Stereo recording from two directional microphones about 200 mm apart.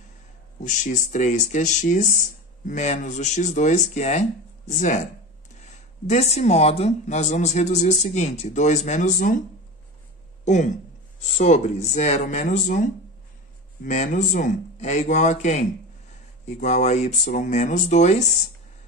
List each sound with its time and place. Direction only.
0.7 s speech: 40° left (ahead or behind)
10.4 s speech: 35° left (ahead or behind)